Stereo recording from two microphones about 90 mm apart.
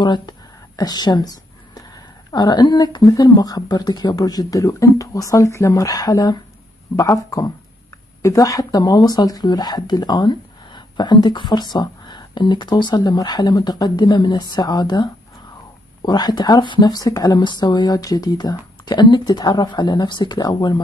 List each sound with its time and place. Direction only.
0.0 s a sound: 55° left (ahead or behind)
2.3 s speech: 50° left (ahead or behind)
16.8 s speech: 45° left (ahead or behind)